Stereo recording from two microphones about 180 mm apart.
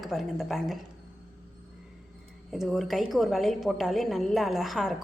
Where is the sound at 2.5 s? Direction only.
Centre (ahead or behind).